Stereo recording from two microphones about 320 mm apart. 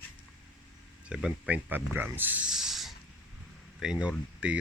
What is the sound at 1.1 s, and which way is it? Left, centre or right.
Speech, centre.